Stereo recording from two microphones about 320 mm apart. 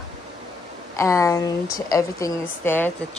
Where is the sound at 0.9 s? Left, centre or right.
Centre.